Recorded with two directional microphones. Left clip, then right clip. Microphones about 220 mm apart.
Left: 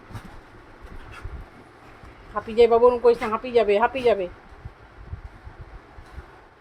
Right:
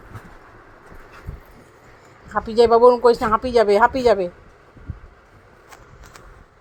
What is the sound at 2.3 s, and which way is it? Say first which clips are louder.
Speech: right 3 dB; 30° right (ahead or behind).